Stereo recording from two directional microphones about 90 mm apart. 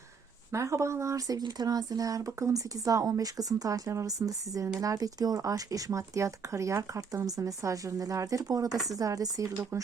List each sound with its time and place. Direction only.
0.5 s speech: 35° right (ahead or behind)